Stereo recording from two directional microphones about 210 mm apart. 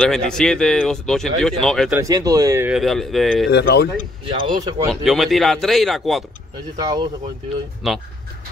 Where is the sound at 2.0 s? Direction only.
15° right (ahead or behind); by 3.5 s centre (ahead or behind).